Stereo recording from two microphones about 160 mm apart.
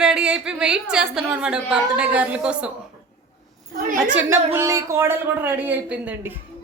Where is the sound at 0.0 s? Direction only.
5° right (ahead or behind).